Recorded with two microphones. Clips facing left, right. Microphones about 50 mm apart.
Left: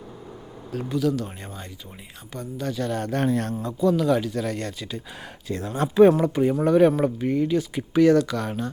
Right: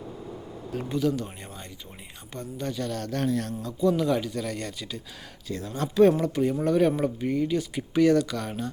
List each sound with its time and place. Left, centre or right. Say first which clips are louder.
0.7 s speech: left 2 dB; centre
1.4 s speech: left 3 dB; centre
3.0 s speech: left 3 dB; left
3.8 s speech: left 3 dB; centre
5.5 s speech: left 5 dB; left
5.9 s speech: left 4 dB; left; by 8.7 s centre